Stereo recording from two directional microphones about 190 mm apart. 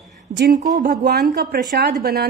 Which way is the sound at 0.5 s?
20° right (ahead or behind).